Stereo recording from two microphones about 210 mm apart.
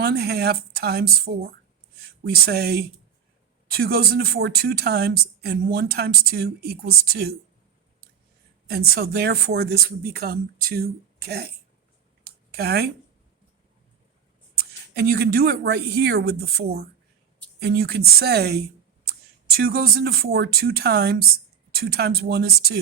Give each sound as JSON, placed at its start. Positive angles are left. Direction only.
{"t": 0.0, "sound": "speech", "side_deg": -50}
{"t": 8.7, "sound": "speech", "side_deg": -45}
{"t": 12.2, "sound": "a sound", "side_deg": -50}
{"t": 14.5, "sound": "speech", "side_deg": -50}